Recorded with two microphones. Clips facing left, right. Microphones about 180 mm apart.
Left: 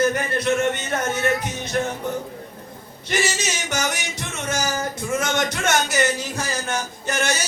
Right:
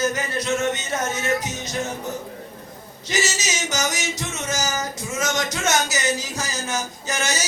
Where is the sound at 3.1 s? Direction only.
60° left (ahead or behind).